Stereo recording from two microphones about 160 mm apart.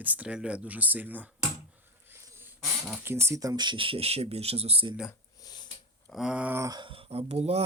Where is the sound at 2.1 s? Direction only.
15° right (ahead or behind).